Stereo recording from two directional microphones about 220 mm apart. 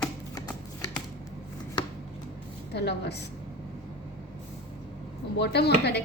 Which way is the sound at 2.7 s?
50° left (ahead or behind).